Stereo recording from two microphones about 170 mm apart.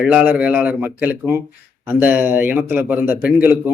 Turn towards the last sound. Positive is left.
turn(degrees=-10)  # may be behind; listen again after turning